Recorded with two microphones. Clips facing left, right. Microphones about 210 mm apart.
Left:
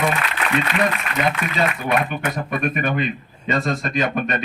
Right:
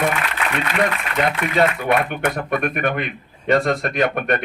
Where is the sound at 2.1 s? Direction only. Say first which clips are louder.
Right 3 dB; 65° right (ahead or behind).